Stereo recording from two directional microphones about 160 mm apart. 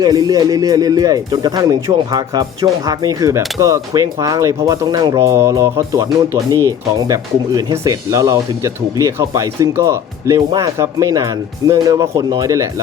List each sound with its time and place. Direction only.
0.0 s speech: 25° right (ahead or behind)